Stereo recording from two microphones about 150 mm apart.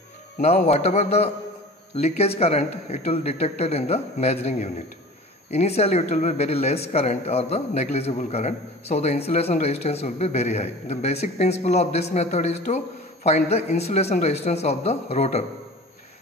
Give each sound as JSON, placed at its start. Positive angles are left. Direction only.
{"t": 0.4, "sound": "speech", "side_deg": 45}